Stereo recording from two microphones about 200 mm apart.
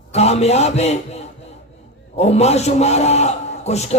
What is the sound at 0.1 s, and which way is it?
A man's voice, 30° left (ahead or behind).